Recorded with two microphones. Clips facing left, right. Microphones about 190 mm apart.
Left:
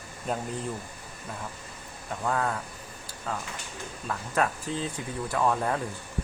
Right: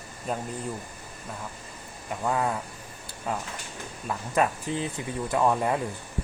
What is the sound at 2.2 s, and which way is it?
Speech, 15° right (ahead or behind).